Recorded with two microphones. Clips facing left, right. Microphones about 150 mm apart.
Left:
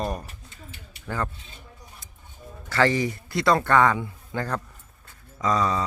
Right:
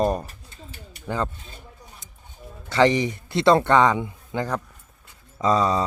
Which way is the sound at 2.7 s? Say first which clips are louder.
Right 3 dB; 20° right (ahead or behind).